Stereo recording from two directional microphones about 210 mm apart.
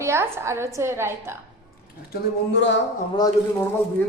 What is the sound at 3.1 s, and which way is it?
Speech, 20° left (ahead or behind).